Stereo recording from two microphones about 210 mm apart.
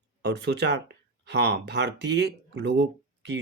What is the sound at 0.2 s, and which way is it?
Speech, 55° right (ahead or behind).